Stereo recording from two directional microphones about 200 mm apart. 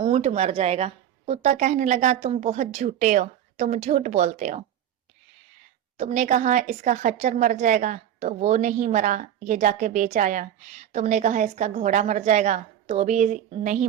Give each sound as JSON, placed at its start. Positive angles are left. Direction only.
{"t": 0.0, "sound": "a woman's voice", "side_deg": -35}
{"t": 6.0, "sound": "a woman's voice", "side_deg": -35}